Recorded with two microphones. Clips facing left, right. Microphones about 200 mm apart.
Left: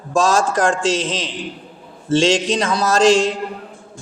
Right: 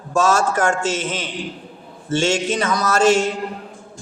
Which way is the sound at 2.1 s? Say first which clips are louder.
Left 4 dB; 35° left (ahead or behind).